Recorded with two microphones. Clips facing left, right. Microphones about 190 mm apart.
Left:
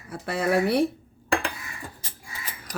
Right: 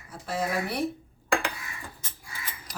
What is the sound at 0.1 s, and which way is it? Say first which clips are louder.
Speech: left 6 dB; 65° left (ahead or behind).